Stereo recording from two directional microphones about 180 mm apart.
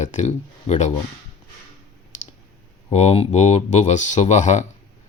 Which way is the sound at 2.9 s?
35° left (ahead or behind).